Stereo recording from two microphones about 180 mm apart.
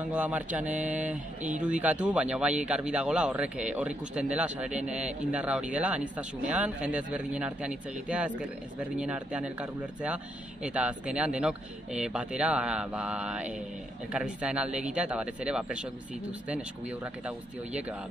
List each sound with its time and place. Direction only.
0.1 s speech: 5° right (ahead or behind)